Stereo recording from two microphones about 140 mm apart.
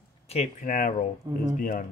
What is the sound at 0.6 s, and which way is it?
Speech, 70° left (ahead or behind).